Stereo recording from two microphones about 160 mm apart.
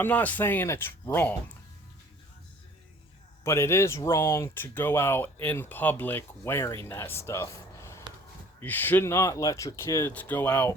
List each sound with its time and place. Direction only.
0.0 s speech: 10° left (ahead or behind)
3.4 s speech: 15° left (ahead or behind)